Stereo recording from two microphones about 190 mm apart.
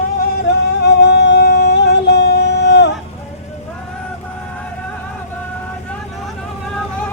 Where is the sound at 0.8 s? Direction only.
60° left (ahead or behind).